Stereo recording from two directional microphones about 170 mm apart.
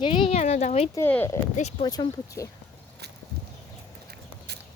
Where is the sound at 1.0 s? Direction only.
15° left (ahead or behind).